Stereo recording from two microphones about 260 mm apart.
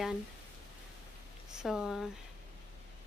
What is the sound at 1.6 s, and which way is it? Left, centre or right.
Speech, centre.